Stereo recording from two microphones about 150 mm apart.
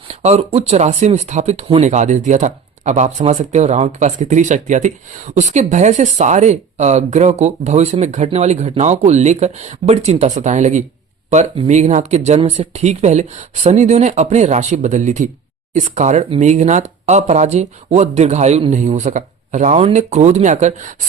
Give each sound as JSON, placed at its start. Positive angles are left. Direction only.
{"t": 0.1, "sound": "speech", "side_deg": -45}